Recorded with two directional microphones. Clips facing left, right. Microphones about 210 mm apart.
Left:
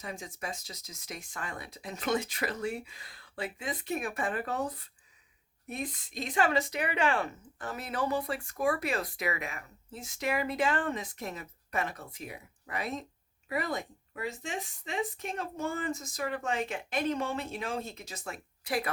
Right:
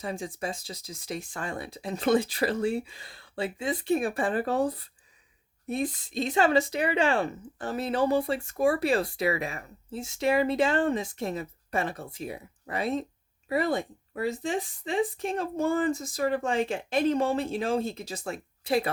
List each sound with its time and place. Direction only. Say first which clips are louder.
0.0 s speech: right 7 dB; 30° right (ahead or behind)